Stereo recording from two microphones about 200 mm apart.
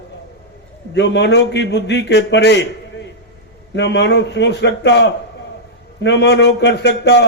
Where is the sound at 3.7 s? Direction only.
60° left (ahead or behind).